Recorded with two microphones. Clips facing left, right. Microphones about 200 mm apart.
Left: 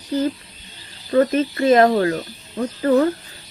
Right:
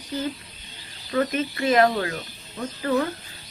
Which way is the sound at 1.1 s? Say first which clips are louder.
Left 7 dB; 35° left (ahead or behind).